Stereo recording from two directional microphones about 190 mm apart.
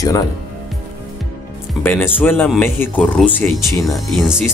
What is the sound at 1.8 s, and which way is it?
Speech, 10° left (ahead or behind).